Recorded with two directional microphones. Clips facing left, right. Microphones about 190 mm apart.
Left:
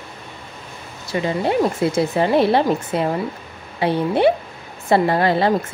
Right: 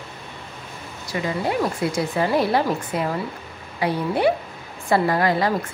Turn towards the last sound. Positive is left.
turn(degrees=25)  # may be behind; listen again after turning